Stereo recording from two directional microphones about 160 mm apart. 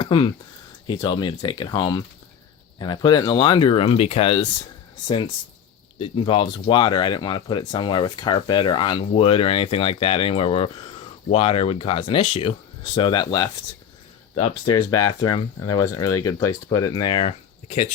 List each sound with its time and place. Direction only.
0.0 s speech: 30° left (ahead or behind)
14.7 s speech: 25° left (ahead or behind)